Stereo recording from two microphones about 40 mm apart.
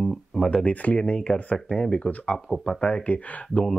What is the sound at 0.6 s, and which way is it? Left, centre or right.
Speech, left.